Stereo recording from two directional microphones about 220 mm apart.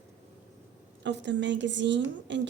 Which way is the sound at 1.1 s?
50° right (ahead or behind).